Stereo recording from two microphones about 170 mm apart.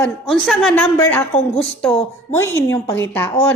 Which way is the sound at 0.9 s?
20° left (ahead or behind).